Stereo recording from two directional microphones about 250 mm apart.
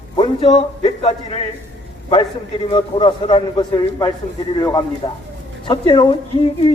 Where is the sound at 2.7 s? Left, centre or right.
Centre.